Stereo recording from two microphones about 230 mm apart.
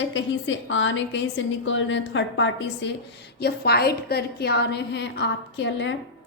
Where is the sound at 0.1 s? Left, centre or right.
Left.